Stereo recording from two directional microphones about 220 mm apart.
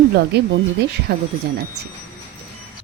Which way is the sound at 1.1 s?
45° right (ahead or behind).